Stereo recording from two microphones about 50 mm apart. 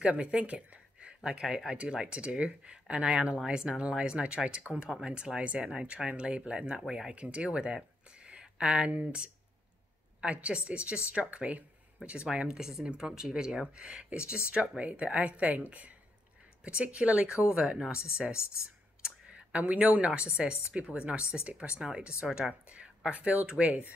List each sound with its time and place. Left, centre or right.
0.0 s speech: right
4.7 s speech: left
5.0 s speech: centre
7.2 s speech: right
10.2 s speech: right